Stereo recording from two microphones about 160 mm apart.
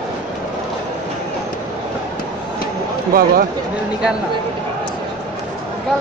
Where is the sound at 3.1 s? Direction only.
70° right (ahead or behind).